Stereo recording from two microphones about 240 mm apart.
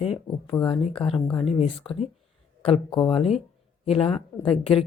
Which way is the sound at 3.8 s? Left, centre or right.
Left.